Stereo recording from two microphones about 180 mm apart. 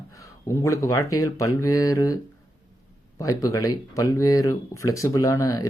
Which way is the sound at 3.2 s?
20° left (ahead or behind).